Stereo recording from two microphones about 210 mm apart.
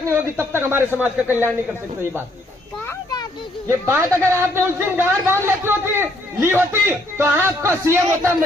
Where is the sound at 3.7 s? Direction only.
10° right (ahead or behind).